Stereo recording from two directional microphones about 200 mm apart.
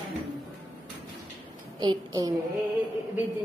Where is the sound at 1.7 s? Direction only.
20° right (ahead or behind).